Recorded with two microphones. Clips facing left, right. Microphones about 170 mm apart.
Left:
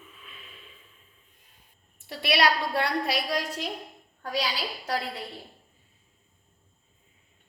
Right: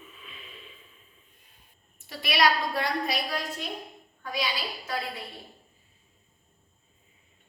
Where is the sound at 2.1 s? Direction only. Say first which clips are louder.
Left 1 dB; 70° left (ahead or behind).